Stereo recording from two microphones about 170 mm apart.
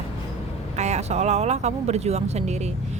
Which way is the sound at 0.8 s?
40° right (ahead or behind).